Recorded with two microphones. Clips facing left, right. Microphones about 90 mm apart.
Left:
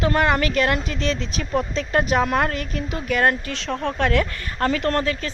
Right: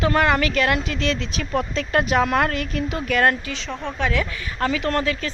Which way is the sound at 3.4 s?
50° left (ahead or behind).